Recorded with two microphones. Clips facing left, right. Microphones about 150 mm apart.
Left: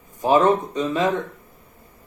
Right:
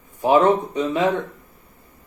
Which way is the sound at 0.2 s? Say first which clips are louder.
Right 1 dB; 15° right (ahead or behind).